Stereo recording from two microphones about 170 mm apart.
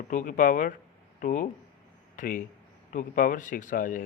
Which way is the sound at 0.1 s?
50° left (ahead or behind).